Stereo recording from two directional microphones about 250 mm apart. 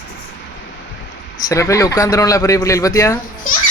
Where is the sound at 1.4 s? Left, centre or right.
Centre.